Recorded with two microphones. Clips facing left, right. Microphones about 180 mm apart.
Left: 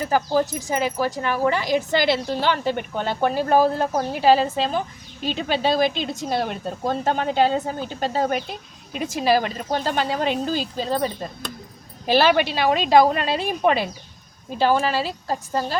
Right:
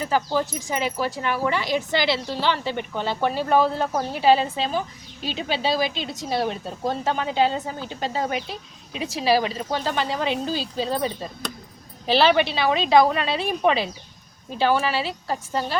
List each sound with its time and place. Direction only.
0.0 s a woman's voice: 45° left (ahead or behind)